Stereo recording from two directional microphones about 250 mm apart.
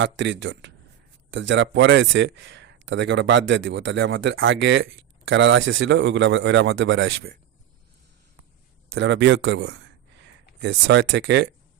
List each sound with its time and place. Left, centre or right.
0.0 s speech: right
8.9 s speech: right